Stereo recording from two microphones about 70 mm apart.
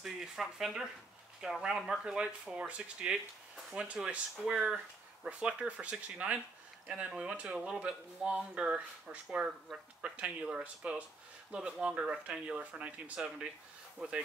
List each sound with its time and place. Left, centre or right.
0.0 s speech: centre
9.7 s speech: centre
10.0 s speech: centre